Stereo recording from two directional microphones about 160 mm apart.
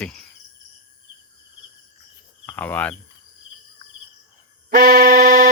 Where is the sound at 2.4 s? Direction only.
10° left (ahead or behind).